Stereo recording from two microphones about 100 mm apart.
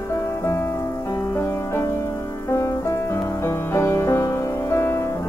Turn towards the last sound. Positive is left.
turn(degrees=25)  # may be behind; listen again after turning